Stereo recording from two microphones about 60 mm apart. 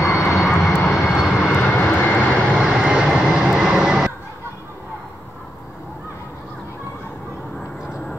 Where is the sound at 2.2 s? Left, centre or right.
Centre.